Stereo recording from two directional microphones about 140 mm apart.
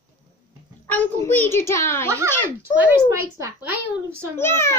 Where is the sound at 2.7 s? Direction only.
10° right (ahead or behind).